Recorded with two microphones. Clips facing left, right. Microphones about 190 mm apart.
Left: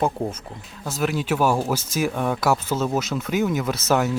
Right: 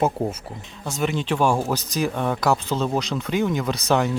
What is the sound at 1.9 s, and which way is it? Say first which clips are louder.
Speech: even; 5° left (ahead or behind).